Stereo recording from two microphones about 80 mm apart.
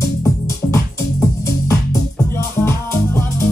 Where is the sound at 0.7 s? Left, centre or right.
Left.